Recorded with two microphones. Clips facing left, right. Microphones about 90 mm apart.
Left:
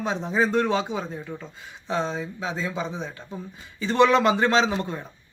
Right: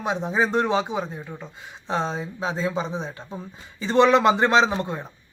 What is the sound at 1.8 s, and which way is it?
Speech, 30° right (ahead or behind).